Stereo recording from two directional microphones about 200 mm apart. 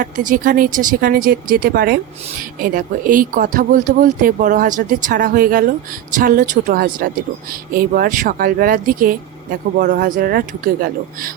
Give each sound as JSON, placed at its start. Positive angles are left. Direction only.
{"t": 0.0, "sound": "speech", "side_deg": -45}